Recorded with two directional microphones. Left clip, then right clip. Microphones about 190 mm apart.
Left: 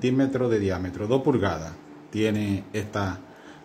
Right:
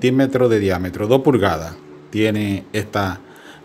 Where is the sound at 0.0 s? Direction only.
40° right (ahead or behind).